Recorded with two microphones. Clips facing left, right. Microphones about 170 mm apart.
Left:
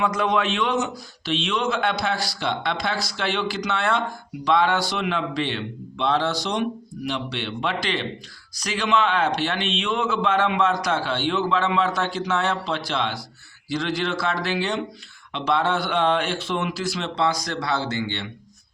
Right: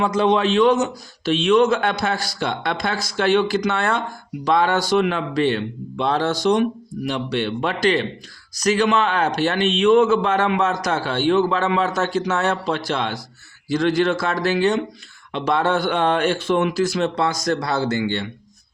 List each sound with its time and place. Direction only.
0.0 s a man's voice: 30° right (ahead or behind); by 18.3 s 45° right (ahead or behind)